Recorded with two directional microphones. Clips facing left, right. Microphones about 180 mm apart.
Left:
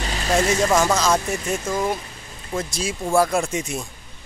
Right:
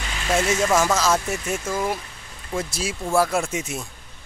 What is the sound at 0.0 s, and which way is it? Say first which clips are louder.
Speech: left 2 dB; 35° left (ahead or behind).